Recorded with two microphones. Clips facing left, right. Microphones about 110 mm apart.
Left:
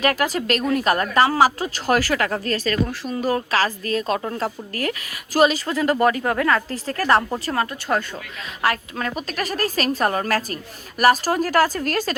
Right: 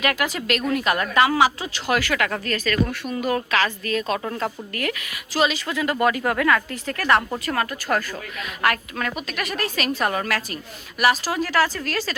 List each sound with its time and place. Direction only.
0.0 s speech: 35° left (ahead or behind)